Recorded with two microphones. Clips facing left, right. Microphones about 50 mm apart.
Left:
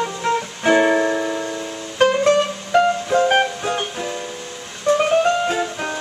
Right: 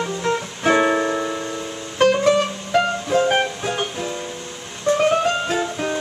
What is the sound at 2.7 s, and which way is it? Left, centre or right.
Music, centre.